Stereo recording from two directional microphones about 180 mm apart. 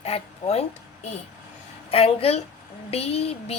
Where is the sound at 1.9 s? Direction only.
35° left (ahead or behind).